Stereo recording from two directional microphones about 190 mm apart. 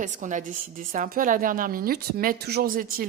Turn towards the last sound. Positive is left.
turn(degrees=-50)  # may be behind; listen again after turning